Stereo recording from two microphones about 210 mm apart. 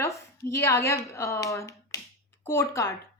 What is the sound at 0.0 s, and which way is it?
A woman's voice, 15° left (ahead or behind).